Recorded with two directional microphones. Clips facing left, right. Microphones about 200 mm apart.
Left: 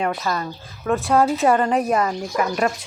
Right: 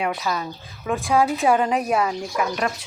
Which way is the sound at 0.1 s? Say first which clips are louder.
Left 1 dB; 5° right (ahead or behind).